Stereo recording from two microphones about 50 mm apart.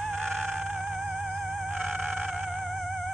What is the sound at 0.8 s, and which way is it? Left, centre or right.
Music, right.